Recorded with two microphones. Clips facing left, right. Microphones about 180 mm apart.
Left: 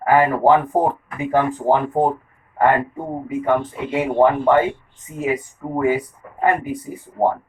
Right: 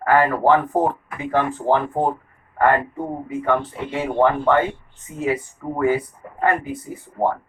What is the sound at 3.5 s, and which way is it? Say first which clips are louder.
Speech: left 2 dB; 15° left (ahead or behind).